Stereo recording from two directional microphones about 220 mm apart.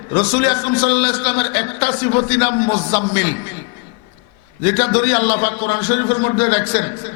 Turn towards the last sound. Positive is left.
turn(degrees=10)  # may be behind; listen again after turning